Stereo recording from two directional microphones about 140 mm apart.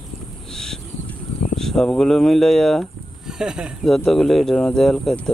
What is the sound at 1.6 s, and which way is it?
Speech, 5° left (ahead or behind).